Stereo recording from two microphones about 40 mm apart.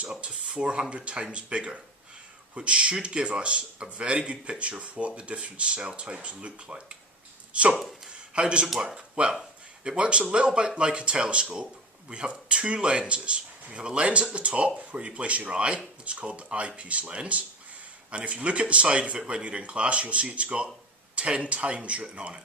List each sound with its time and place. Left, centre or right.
0.1 s speech: right